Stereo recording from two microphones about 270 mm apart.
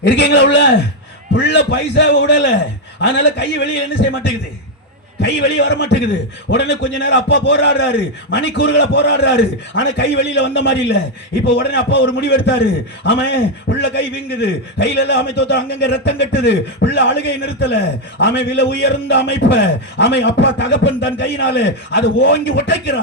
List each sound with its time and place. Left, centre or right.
0.1 s a man's voice: left